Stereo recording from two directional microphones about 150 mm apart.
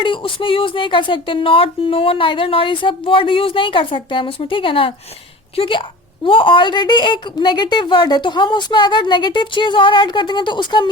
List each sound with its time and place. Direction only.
0.0 s a woman's voice: 35° left (ahead or behind)